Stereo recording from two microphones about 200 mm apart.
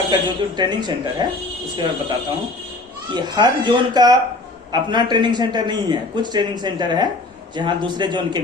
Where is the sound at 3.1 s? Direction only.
20° right (ahead or behind).